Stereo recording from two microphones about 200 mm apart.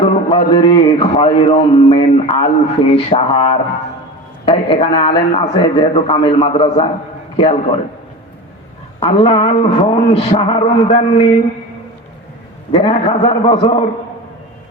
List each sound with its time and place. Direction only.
0.0 s speech: 25° left (ahead or behind)
9.0 s speech: 25° left (ahead or behind)
12.7 s speech: 30° left (ahead or behind)